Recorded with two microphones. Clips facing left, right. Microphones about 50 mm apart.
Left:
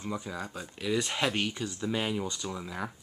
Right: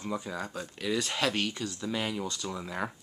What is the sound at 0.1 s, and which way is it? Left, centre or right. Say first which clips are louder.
Speech: right 2 dB; centre.